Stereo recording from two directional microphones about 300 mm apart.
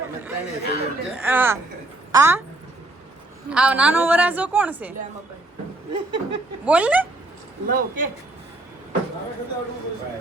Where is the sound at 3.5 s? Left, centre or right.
Centre.